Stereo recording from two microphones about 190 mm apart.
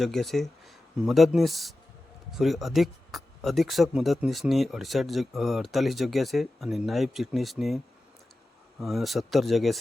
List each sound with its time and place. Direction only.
0.0 s speech: centre (ahead or behind)
8.8 s speech: centre (ahead or behind)